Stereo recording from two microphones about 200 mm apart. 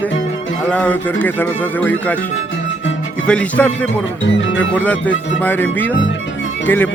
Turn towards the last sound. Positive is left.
turn(degrees=10)  # may be behind; listen again after turning